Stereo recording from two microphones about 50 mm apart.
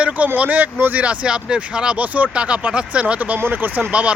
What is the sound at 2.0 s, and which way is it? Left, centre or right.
Speech, right.